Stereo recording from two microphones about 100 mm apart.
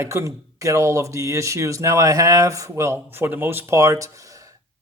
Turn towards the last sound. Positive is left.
turn(degrees=-35)  # may be behind; listen again after turning